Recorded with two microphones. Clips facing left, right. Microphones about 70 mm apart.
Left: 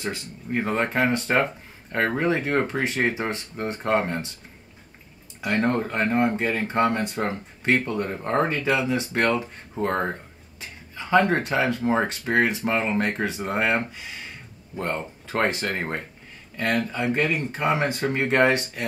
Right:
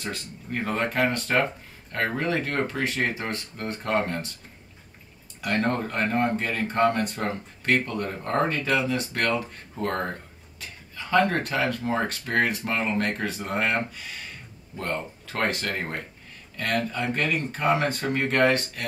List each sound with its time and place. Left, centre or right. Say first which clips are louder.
0.0 s speech: left 3 dB; centre
5.4 s speech: left 2 dB; centre